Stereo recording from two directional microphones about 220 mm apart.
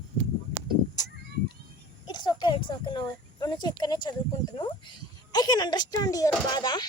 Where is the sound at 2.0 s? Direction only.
20° left (ahead or behind).